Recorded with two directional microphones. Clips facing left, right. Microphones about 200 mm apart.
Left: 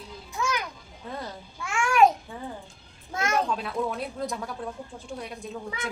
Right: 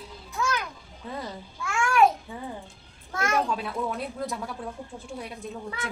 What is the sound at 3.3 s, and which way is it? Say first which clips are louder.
A woman's voice: left 1 dB; centre (ahead or behind).